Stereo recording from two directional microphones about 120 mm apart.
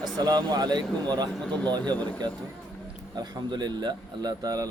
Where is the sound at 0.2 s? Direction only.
35° right (ahead or behind).